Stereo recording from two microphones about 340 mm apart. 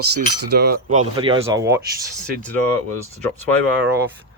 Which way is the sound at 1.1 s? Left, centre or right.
Centre.